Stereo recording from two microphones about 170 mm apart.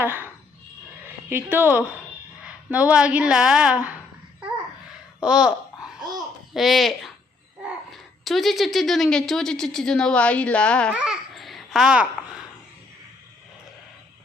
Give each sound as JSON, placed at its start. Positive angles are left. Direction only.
{"t": 0.0, "sound": "a sound", "side_deg": -10}
{"t": 1.0, "sound": "a woman's voice", "side_deg": -10}
{"t": 5.2, "sound": "speech", "side_deg": -5}
{"t": 10.9, "sound": "babbling", "side_deg": -5}